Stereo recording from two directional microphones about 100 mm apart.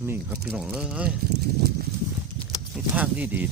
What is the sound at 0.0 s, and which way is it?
Speech, 20° right (ahead or behind).